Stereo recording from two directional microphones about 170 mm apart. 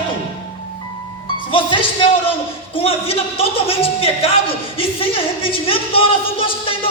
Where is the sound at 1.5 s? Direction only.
30° left (ahead or behind).